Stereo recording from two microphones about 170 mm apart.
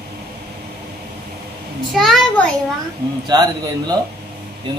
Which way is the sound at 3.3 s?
25° right (ahead or behind).